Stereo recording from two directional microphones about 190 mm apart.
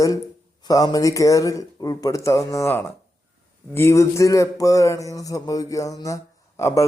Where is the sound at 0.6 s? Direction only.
20° left (ahead or behind).